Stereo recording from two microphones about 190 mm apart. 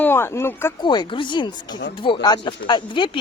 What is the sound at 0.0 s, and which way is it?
Speech, 10° left (ahead or behind).